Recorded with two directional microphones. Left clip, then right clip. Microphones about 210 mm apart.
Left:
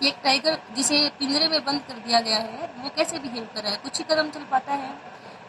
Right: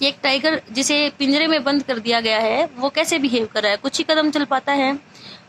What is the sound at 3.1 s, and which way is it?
Speech, 20° right (ahead or behind).